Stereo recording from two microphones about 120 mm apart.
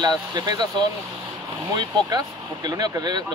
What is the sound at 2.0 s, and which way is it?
Speech, 35° right (ahead or behind).